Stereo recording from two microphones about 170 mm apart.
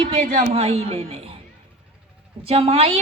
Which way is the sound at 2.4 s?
35° right (ahead or behind).